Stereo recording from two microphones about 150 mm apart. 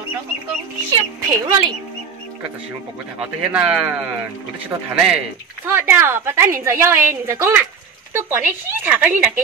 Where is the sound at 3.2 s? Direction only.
5° right (ahead or behind).